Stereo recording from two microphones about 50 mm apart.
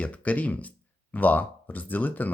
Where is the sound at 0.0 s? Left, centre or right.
Left.